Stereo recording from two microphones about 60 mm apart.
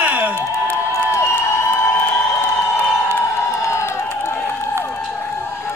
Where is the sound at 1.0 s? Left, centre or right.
Left.